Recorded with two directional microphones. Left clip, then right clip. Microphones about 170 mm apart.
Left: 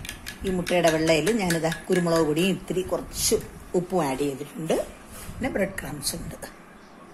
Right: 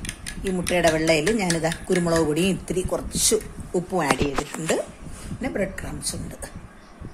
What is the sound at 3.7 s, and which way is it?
Speech, centre (ahead or behind).